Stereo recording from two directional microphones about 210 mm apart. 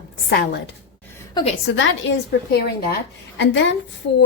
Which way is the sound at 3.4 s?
60° left (ahead or behind).